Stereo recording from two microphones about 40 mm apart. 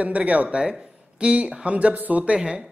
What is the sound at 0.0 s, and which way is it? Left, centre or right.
Speech, right.